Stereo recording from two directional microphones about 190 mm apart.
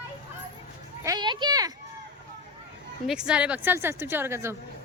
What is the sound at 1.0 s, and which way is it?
Speech, 20° right (ahead or behind).